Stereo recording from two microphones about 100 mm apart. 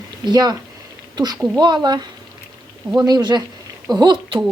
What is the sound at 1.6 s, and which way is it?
Speech, 45° right (ahead or behind).